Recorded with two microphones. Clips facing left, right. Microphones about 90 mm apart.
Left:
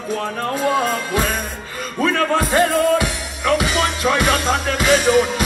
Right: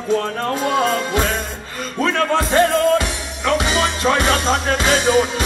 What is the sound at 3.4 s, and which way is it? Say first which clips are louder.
Music: even; 25° right (ahead or behind).